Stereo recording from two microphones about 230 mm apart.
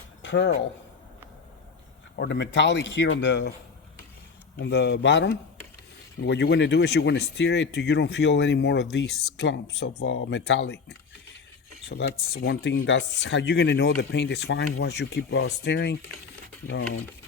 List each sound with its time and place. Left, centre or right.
0.2 s speech: left
2.1 s speech: left
4.6 s speech: left